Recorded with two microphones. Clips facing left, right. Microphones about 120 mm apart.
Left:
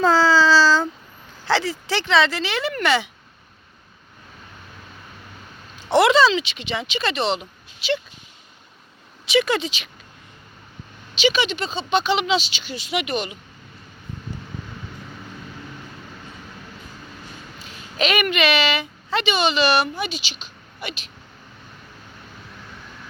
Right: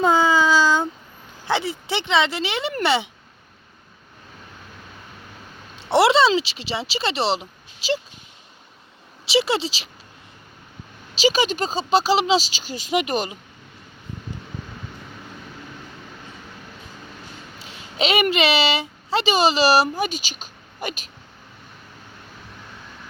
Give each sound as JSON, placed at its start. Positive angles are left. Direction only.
{"t": 0.0, "sound": "a sound", "side_deg": -15}
{"t": 1.5, "sound": "speech", "side_deg": -20}
{"t": 5.9, "sound": "speech", "side_deg": -30}
{"t": 9.3, "sound": "speech", "side_deg": -30}
{"t": 11.2, "sound": "speech", "side_deg": -40}
{"t": 17.9, "sound": "a woman's voice", "side_deg": -25}